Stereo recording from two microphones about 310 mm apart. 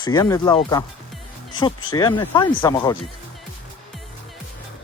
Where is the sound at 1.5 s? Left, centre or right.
Centre.